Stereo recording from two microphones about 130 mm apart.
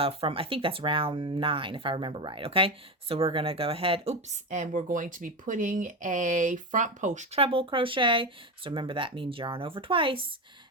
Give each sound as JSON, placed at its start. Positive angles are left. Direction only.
{"t": 0.0, "sound": "speech", "side_deg": -45}
{"t": 7.3, "sound": "speech", "side_deg": -45}